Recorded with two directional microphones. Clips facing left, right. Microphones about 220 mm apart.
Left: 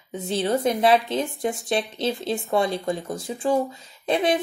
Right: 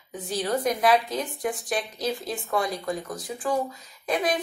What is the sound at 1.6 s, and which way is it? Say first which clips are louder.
Speech: left 4 dB; centre (ahead or behind).